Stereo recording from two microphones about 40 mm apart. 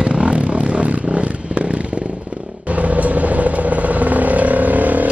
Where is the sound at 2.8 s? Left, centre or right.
Right.